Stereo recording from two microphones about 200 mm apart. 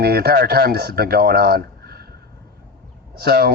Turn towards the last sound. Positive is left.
turn(degrees=-50)  # may be behind; listen again after turning